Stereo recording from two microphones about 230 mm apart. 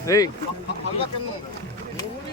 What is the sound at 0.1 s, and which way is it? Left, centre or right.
Speech, centre.